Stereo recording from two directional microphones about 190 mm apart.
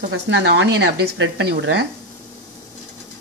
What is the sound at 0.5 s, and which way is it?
Speech, 65° right (ahead or behind).